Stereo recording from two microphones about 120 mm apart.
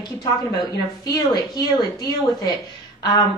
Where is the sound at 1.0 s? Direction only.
35° left (ahead or behind).